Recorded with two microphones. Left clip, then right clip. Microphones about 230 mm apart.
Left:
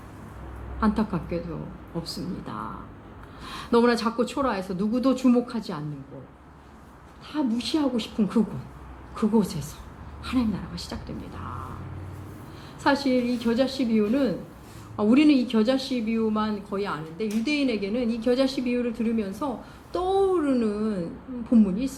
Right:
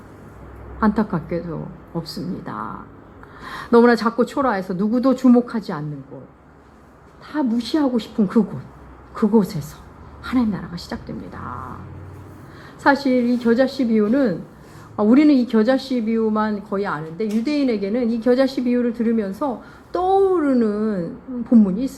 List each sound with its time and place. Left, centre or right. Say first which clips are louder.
0.8 s a woman's voice: right 6 dB; right
7.3 s a woman's voice: right 5 dB; right
12.8 s a woman's voice: right 6 dB; right